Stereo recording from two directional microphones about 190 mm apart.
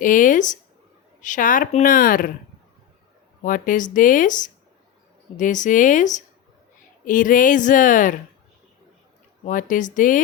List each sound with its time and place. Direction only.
0.0 s speech: 45° left (ahead or behind)
3.4 s speech: 45° left (ahead or behind)
9.5 s speech: 45° left (ahead or behind)